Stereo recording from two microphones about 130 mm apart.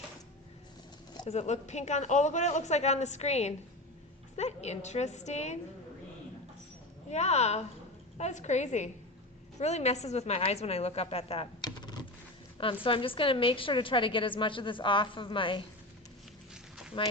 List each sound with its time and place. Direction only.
1.3 s a woman's voice: 60° left (ahead or behind)
7.1 s a woman's voice: 60° left (ahead or behind)
11.6 s computer keyboard: 35° left (ahead or behind)
12.5 s a woman's voice: 40° left (ahead or behind)
16.9 s a woman's voice: 40° left (ahead or behind)